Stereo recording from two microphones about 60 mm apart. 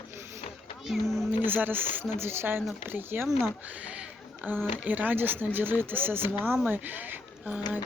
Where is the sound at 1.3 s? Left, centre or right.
Right.